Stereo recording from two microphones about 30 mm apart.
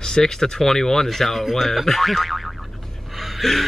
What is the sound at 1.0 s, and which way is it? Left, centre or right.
Speech, centre.